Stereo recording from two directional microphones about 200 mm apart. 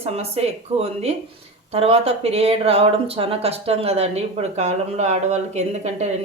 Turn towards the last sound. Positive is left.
turn(degrees=-35)  # may be behind; listen again after turning